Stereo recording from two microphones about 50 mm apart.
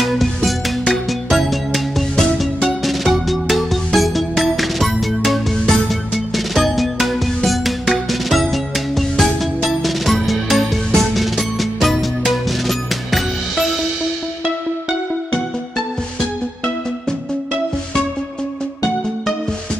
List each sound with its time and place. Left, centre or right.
0.0 s music: centre